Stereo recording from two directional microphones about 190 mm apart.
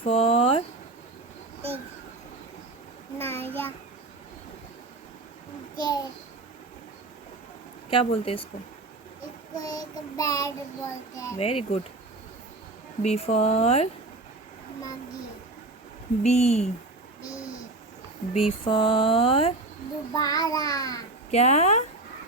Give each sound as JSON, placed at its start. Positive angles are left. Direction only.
{"t": 0.0, "sound": "a sound", "side_deg": 30}
{"t": 3.2, "sound": "child singing", "side_deg": 10}
{"t": 5.7, "sound": "a sound", "side_deg": 20}
{"t": 7.9, "sound": "speech", "side_deg": 30}
{"t": 9.6, "sound": "child singing", "side_deg": 20}
{"t": 11.3, "sound": "speech", "side_deg": 30}
{"t": 13.0, "sound": "speech", "side_deg": 30}
{"t": 16.2, "sound": "speech", "side_deg": 35}
{"t": 18.3, "sound": "speech", "side_deg": 25}
{"t": 20.1, "sound": "speech", "side_deg": 20}
{"t": 21.2, "sound": "speech", "side_deg": 35}